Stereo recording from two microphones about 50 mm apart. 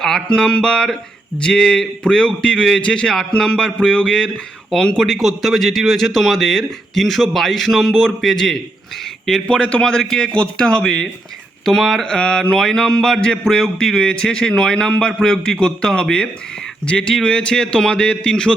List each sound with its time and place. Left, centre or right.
0.0 s a man's voice: centre
5.2 s a man's voice: centre
9.5 s a man's voice: left; by 12.0 s centre
12.0 s a man's voice: centre